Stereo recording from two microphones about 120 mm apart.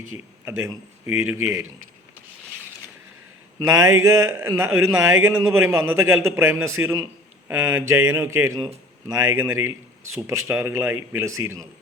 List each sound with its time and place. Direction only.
0.5 s a man's voice: 15° right (ahead or behind)
3.7 s a man's voice: 30° right (ahead or behind)